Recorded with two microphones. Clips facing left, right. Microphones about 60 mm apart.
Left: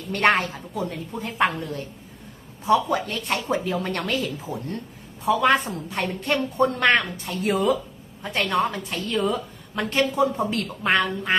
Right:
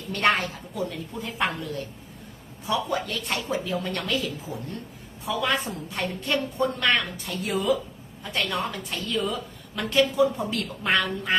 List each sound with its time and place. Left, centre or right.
0.1 s a woman's voice: left
5.4 s a woman's voice: left